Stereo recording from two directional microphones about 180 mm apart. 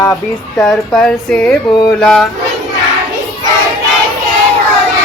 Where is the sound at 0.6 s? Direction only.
5° left (ahead or behind).